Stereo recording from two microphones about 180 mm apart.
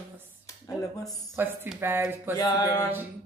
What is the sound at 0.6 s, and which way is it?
Speech, 20° left (ahead or behind).